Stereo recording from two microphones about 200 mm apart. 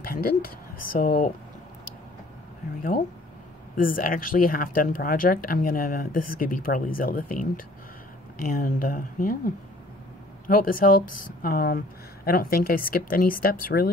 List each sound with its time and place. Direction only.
0.0 s speech: 45° left (ahead or behind)
3.7 s speech: 45° left (ahead or behind)